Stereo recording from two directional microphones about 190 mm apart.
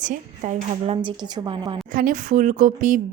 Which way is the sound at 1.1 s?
20° right (ahead or behind).